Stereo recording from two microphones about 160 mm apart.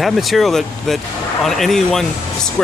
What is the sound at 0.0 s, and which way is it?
Speech, centre (ahead or behind).